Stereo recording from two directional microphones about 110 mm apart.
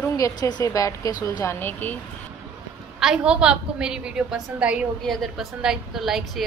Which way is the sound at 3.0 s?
5° right (ahead or behind).